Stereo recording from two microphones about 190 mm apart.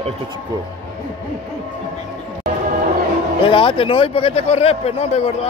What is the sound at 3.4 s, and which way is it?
A man's voice, 25° left (ahead or behind).